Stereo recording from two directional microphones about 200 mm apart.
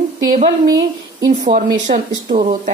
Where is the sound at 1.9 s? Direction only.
40° right (ahead or behind).